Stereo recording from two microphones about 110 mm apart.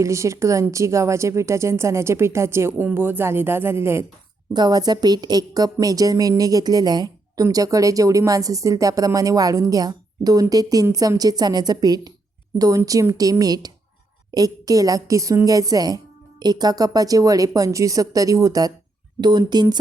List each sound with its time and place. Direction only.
0.0 s speech: 30° right (ahead or behind)
4.5 s speech: 40° right (ahead or behind)